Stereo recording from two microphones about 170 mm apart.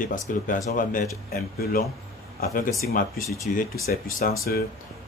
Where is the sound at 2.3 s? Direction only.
65° left (ahead or behind).